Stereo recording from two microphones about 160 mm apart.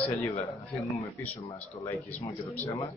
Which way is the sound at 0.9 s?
15° left (ahead or behind).